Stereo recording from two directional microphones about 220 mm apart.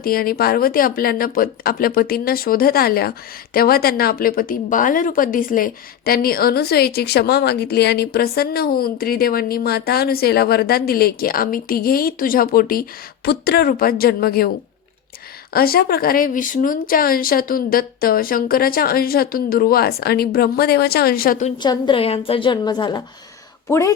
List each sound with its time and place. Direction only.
0.0 s speech: 40° left (ahead or behind)
15.5 s speech: 45° left (ahead or behind)
21.6 s a woman's voice: 20° left (ahead or behind)